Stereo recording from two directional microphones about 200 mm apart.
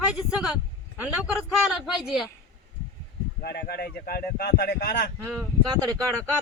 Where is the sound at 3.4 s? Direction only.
50° left (ahead or behind).